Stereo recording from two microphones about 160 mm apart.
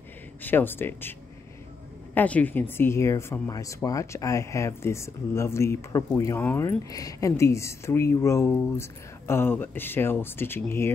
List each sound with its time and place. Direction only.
0.4 s speech: 10° left (ahead or behind)
2.1 s speech: 10° left (ahead or behind)